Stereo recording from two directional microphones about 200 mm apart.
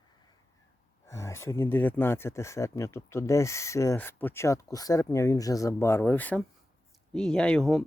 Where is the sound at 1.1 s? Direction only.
15° left (ahead or behind).